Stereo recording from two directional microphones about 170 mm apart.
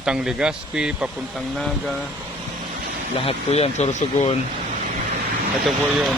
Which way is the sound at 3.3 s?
35° left (ahead or behind).